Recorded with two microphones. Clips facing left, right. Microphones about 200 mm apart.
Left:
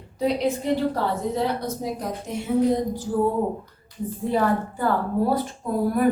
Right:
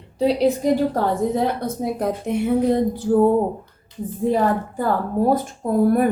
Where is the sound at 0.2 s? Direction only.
30° right (ahead or behind).